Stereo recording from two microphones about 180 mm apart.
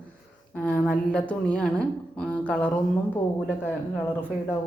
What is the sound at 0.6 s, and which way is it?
A woman's voice, 5° left (ahead or behind).